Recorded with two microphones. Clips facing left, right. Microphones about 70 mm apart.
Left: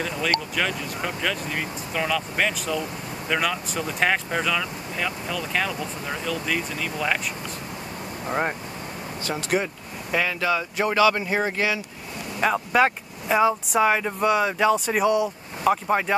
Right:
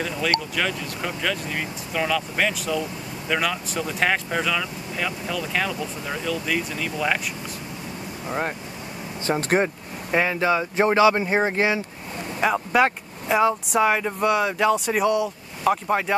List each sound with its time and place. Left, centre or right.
0.0 s speech: centre
8.3 s speech: centre
9.4 s speech: right
10.1 s speech: right
12.4 s speech: centre